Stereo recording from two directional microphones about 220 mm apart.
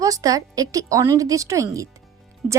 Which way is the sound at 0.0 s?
15° right (ahead or behind).